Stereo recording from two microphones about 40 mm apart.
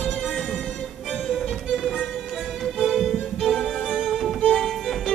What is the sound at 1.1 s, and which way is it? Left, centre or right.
Music, centre.